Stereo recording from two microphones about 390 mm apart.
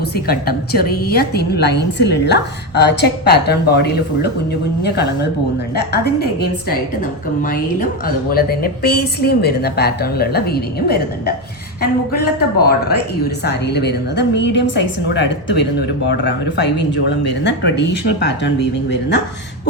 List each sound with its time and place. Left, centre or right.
0.3 s a woman's voice: left